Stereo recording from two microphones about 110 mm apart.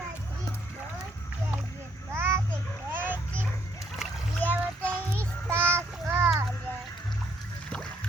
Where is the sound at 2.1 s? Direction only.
20° right (ahead or behind).